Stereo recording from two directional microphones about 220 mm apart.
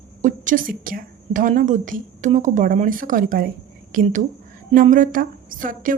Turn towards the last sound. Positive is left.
turn(degrees=-40)  # may be behind; listen again after turning